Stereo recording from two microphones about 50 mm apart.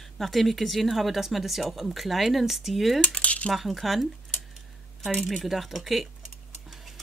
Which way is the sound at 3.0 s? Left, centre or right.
Left.